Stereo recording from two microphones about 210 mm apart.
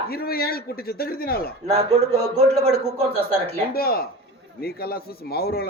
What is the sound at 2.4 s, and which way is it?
Speech, 30° right (ahead or behind).